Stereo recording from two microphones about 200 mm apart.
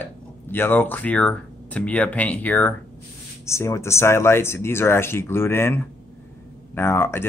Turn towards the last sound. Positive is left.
turn(degrees=10)  # may be behind; listen again after turning